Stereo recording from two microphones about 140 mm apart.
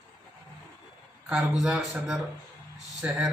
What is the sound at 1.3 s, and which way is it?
A man's voice, 5° right (ahead or behind).